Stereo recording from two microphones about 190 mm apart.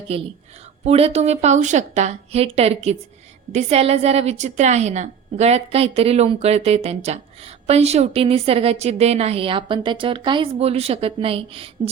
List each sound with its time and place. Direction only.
0.1 s a woman's voice: 35° right (ahead or behind)